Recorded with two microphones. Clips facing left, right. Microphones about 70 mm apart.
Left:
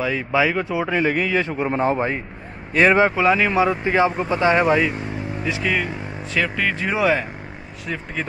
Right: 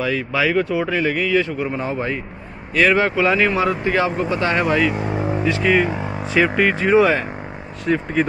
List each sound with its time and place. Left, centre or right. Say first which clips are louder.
0.0 s a man's voice: even; centre
5.6 s speech: right 6 dB; centre
6.4 s speech: right 6 dB; centre
6.7 s speech: right 3 dB; centre